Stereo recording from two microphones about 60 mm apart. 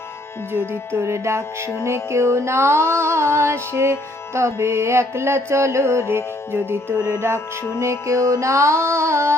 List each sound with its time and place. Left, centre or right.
0.7 s music: right
7.8 s music: right